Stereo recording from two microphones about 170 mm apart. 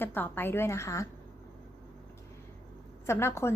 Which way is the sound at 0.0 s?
10° left (ahead or behind).